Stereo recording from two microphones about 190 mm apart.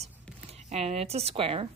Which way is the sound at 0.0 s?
35° right (ahead or behind).